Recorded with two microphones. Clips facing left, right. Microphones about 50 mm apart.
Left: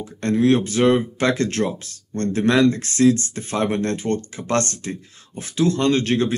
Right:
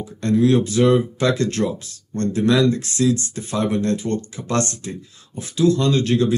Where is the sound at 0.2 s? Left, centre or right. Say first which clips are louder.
Right 1 dB; left.